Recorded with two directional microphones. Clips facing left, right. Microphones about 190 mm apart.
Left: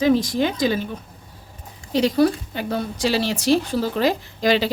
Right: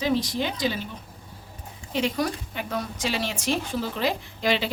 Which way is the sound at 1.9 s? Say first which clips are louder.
Left 8 dB; 35° left (ahead or behind).